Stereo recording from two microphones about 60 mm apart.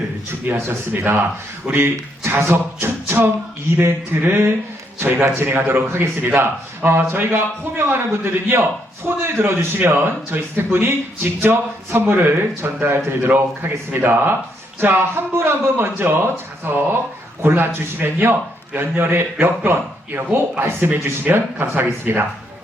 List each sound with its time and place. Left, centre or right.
0.5 s a man's voice: right
1.6 s a man's voice: right